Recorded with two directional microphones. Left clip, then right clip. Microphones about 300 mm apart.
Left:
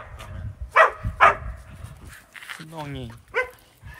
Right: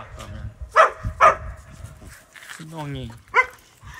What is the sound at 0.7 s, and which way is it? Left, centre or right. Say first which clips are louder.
Dog: right 1 dB; left.